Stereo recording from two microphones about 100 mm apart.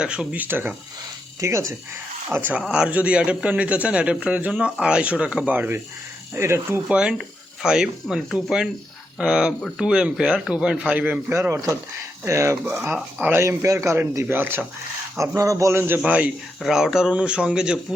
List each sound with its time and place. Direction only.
0.0 s speech: 10° right (ahead or behind)
1.4 s speech: 30° right (ahead or behind)
2.3 s speech: 20° right (ahead or behind)
5.5 s speech: 20° right (ahead or behind)
6.8 s speech: 10° right (ahead or behind)
9.6 s speech: 10° left (ahead or behind)
9.8 s speech: 10° right (ahead or behind)
15.4 s a man's voice: 30° right (ahead or behind)
16.0 s speech: 15° right (ahead or behind)